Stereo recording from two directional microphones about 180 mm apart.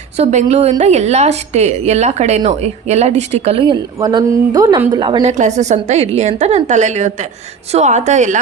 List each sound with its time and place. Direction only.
0.2 s a woman's voice: 40° right (ahead or behind)
3.9 s a woman's voice: 20° right (ahead or behind)
5.2 s a woman's voice: 40° right (ahead or behind)